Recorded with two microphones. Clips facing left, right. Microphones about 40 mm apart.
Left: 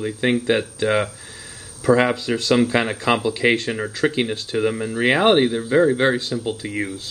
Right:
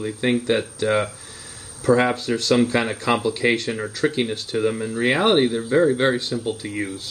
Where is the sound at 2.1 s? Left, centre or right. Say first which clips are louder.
Left 1 dB; left.